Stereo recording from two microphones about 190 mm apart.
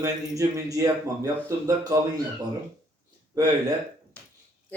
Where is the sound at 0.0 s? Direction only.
15° right (ahead or behind).